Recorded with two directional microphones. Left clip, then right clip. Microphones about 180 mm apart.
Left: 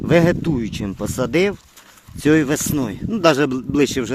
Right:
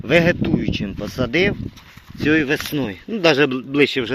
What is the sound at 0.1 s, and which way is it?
A man's voice, 30° left (ahead or behind).